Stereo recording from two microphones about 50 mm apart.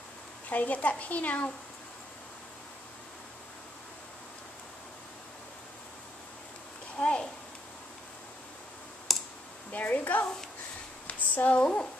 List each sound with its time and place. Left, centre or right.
0.5 s a woman's voice: left
7.0 s speech: left
9.1 s clicking: centre
9.7 s a woman's voice: left